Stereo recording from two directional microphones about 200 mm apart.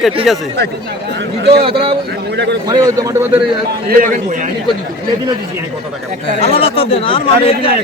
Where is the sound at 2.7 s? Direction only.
15° right (ahead or behind).